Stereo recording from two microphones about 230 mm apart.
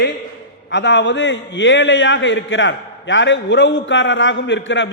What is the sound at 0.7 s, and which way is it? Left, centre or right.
A man's voice, left.